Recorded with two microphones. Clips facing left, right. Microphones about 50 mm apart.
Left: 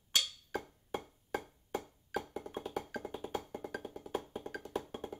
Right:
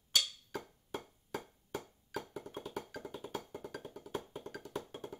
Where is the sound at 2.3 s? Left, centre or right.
Left.